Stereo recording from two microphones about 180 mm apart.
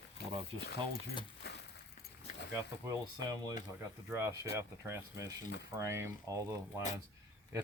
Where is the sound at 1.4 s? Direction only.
65° left (ahead or behind).